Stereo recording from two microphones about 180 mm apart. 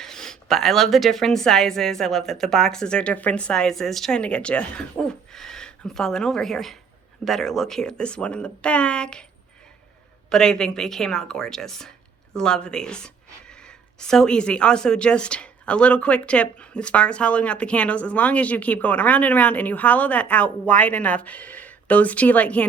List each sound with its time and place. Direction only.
0.0 s a woman's voice: 5° left (ahead or behind)
10.2 s a woman's voice: 5° left (ahead or behind)